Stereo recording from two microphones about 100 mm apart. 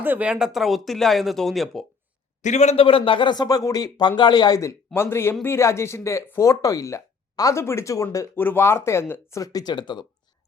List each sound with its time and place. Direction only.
0.0 s speech: 15° right (ahead or behind); by 1.8 s centre (ahead or behind)
2.7 s speech: 65° left (ahead or behind); by 4.7 s 40° left (ahead or behind)
4.9 s speech: 25° left (ahead or behind)
9.4 s speech: 35° left (ahead or behind)
9.7 s speech: 50° left (ahead or behind)